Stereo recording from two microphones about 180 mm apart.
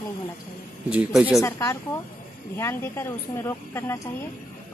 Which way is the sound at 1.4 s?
15° left (ahead or behind).